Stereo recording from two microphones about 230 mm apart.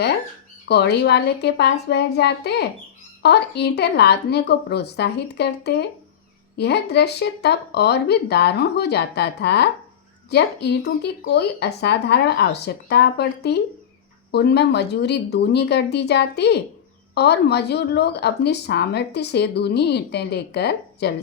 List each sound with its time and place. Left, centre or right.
0.7 s speech: left